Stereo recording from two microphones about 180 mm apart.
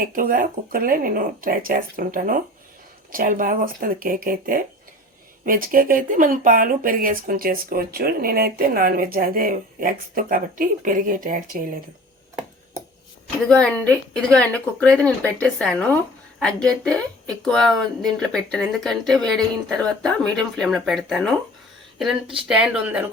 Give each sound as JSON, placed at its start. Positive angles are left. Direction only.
{"t": 0.0, "sound": "speech", "side_deg": -50}
{"t": 13.5, "sound": "speech", "side_deg": 5}